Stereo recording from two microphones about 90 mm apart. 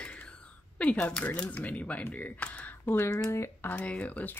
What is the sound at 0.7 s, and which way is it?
Speech, 15° left (ahead or behind).